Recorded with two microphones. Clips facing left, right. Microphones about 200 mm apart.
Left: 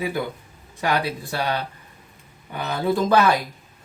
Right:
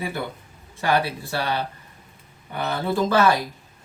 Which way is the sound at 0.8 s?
15° left (ahead or behind).